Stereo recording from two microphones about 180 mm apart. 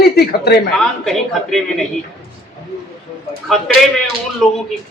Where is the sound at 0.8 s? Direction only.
Centre (ahead or behind).